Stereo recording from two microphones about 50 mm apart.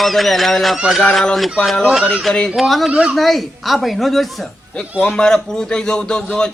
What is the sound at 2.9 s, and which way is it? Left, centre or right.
Speech, centre.